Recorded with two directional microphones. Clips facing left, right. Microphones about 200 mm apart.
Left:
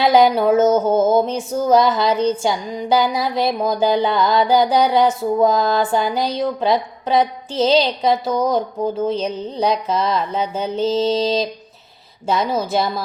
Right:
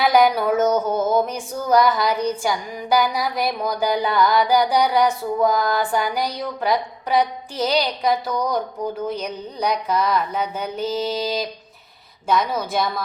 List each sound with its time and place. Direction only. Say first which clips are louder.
0.0 s female singing: left 3 dB; 25° left (ahead or behind)